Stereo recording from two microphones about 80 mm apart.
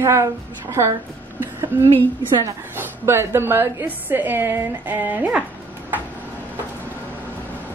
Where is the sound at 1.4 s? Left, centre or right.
Right.